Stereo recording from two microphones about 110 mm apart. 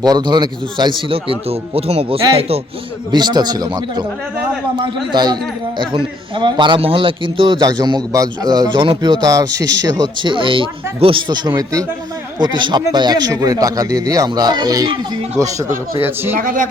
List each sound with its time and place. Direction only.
0.0 s a man's voice: 40° right (ahead or behind); by 2.2 s 60° right (ahead or behind)
3.1 s speech: 40° right (ahead or behind)
5.1 s a man's voice: 40° right (ahead or behind)
16.0 s speech: 20° right (ahead or behind)